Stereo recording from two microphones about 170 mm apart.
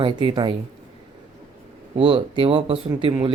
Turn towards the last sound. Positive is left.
turn(degrees=-30)  # may be behind; listen again after turning